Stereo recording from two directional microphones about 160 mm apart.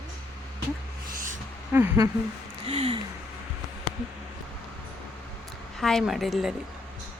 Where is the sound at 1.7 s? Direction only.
15° right (ahead or behind).